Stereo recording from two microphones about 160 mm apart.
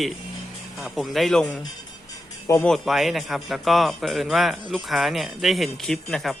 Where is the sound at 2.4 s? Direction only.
15° left (ahead or behind).